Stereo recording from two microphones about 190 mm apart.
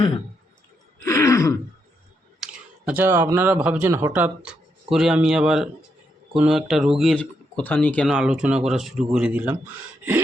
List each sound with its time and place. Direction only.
1.0 s throat clearing: 15° left (ahead or behind)
2.4 s speech: 5° right (ahead or behind)
8.1 s speech: 5° right (ahead or behind)